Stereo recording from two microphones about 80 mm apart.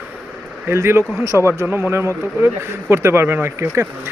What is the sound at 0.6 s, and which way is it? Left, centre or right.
Speech, right.